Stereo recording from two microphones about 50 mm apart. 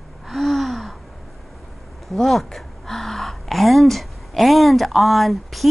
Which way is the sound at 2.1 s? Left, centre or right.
Centre.